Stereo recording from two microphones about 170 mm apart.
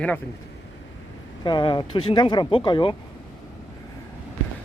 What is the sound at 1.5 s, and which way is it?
Speech, 25° left (ahead or behind).